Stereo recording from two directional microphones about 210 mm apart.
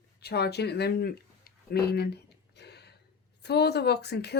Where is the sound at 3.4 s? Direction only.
50° left (ahead or behind).